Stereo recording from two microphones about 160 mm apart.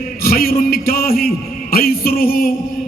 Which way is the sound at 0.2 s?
70° left (ahead or behind).